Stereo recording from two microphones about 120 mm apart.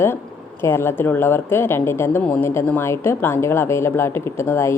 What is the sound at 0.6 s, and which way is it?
Speech, 20° left (ahead or behind).